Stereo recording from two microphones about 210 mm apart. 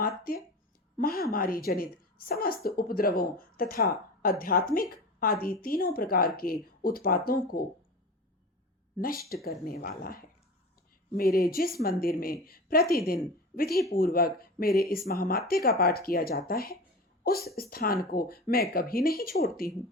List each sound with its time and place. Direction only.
0.9 s a woman's voice: 45° left (ahead or behind)
9.0 s a woman's voice: 45° left (ahead or behind)